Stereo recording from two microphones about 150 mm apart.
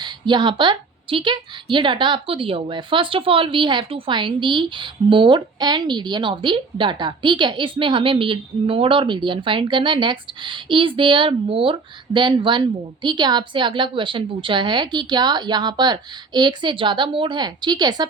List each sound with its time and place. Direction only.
0.0 s a woman's voice: 30° right (ahead or behind)